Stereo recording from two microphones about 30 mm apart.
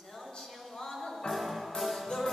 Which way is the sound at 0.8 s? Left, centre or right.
Centre.